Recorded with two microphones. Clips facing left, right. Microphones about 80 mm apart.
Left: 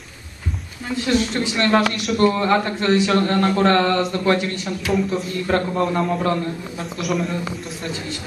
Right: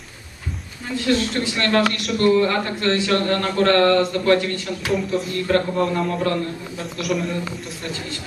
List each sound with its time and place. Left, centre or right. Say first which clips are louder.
0.8 s a man's voice: even; centre
4.9 s a man's voice: left 1 dB; centre
5.5 s a man's voice: even; centre
6.8 s a man's voice: even; centre